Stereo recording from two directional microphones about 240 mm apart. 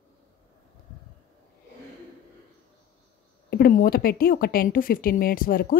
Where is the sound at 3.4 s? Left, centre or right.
Left.